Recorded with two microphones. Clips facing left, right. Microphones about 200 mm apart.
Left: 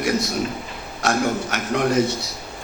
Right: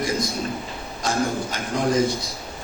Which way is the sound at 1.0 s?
70° left (ahead or behind).